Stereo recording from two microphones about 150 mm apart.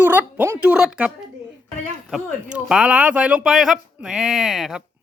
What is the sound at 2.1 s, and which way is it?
Speech, centre (ahead or behind).